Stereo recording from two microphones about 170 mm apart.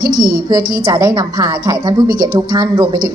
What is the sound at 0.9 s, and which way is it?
A woman's voice, 20° right (ahead or behind).